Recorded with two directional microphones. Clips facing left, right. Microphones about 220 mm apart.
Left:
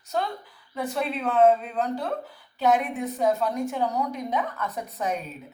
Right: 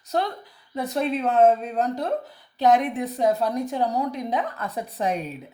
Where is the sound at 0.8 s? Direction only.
40° right (ahead or behind).